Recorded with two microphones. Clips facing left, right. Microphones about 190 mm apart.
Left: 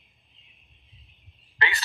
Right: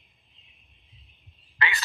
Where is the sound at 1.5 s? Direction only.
35° left (ahead or behind).